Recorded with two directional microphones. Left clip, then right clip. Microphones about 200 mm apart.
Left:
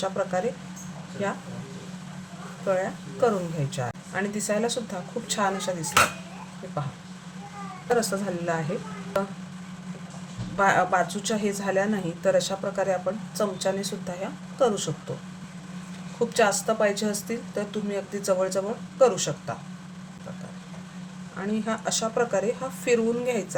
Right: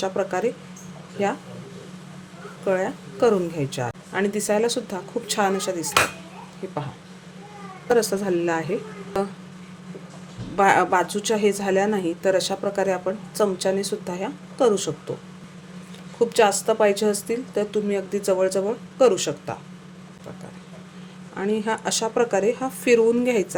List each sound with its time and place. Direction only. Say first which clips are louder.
0.0 s a woman's voice: right 2 dB; 45° right (ahead or behind)
2.6 s a woman's voice: right 3 dB; 40° right (ahead or behind)
7.9 s speech: right 5 dB; 40° right (ahead or behind)
10.6 s speech: right 4 dB; 40° right (ahead or behind)
16.3 s speech: right 3 dB; 40° right (ahead or behind)
21.5 s speech: right 4 dB; 40° right (ahead or behind)